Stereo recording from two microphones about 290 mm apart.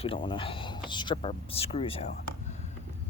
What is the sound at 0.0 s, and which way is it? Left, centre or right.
Speech, centre.